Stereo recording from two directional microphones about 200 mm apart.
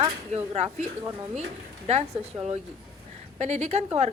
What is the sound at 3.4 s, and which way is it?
Speech, 35° right (ahead or behind).